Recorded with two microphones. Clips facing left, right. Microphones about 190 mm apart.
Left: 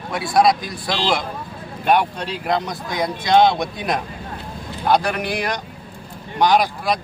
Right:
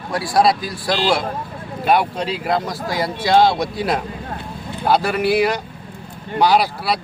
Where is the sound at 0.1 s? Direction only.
Centre (ahead or behind).